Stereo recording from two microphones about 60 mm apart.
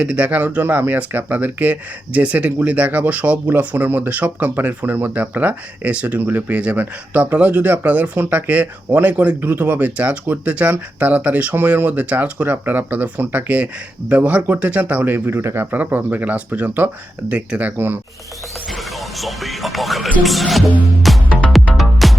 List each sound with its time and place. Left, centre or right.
0.0 s speech: right
15.4 s speech: right
15.7 s speech: right
18.7 s music: centre
20.2 s speech: centre
21.0 s music: centre